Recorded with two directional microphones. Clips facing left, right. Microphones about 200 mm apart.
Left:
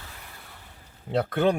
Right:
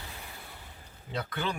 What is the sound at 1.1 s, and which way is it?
Speech, 60° left (ahead or behind).